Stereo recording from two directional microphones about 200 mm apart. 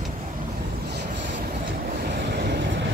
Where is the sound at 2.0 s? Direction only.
55° right (ahead or behind).